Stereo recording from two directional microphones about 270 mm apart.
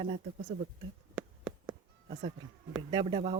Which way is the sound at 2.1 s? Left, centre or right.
Right.